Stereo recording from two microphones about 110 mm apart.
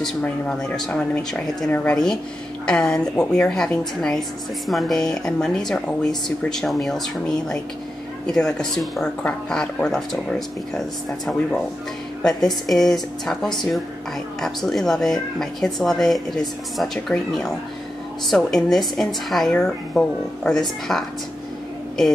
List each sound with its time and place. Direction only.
0.0 s speech: 5° left (ahead or behind)
12.2 s speech: 5° left (ahead or behind)